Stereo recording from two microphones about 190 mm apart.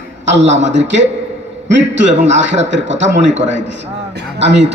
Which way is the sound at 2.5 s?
75° right (ahead or behind).